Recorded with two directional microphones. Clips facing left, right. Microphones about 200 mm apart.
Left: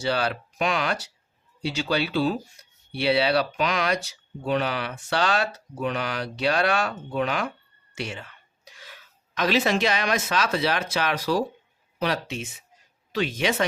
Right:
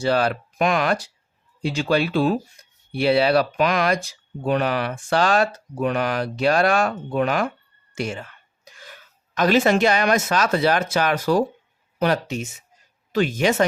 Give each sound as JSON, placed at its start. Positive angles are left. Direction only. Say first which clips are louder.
{"t": 0.0, "sound": "speech", "louder": "right 5 dB", "side_deg": -50}